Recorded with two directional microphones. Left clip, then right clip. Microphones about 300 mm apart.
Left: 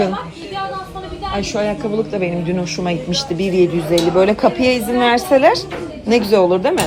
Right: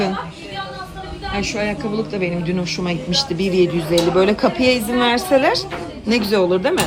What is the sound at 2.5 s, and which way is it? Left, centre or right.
Speech, right.